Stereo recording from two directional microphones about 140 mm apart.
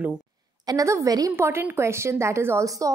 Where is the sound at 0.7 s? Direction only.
25° right (ahead or behind).